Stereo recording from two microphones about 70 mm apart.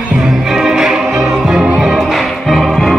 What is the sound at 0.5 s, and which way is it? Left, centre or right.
Music, centre.